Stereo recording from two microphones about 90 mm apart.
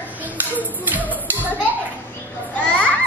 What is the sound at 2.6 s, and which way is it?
Children playing, 15° left (ahead or behind).